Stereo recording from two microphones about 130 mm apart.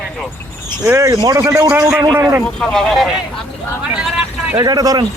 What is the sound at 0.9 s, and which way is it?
Speech, 20° right (ahead or behind).